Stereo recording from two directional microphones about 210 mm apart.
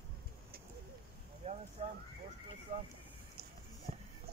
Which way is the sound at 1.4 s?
30° right (ahead or behind).